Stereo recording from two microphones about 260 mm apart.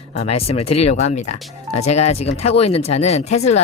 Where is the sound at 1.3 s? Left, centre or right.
Left.